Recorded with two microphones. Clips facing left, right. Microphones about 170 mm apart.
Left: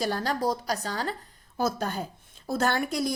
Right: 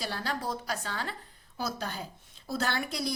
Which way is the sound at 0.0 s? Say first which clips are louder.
Left 7 dB; 45° left (ahead or behind).